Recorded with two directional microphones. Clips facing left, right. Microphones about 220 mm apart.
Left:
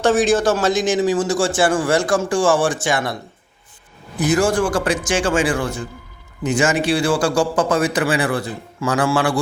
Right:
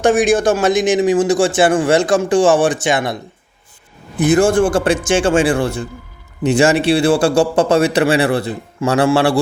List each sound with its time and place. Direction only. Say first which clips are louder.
0.0 s a man's voice: right 3 dB; 15° right (ahead or behind)
4.4 s a man's voice: right 5 dB; 25° right (ahead or behind)